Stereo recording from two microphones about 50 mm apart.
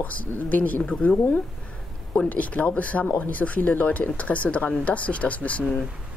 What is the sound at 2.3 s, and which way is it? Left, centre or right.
Speech, left.